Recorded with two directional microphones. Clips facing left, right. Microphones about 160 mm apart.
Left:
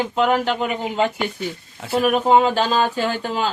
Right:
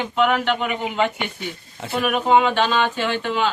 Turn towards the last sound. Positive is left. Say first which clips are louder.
# even
turn(degrees=40)  # may be behind; listen again after turning